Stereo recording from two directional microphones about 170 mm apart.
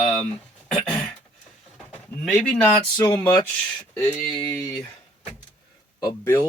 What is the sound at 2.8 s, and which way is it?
Speech, 25° left (ahead or behind).